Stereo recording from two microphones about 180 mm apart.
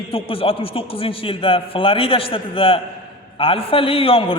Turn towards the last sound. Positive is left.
turn(degrees=30)  # may be behind; listen again after turning